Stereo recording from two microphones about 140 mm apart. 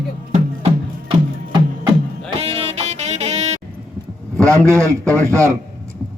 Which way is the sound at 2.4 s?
45° right (ahead or behind).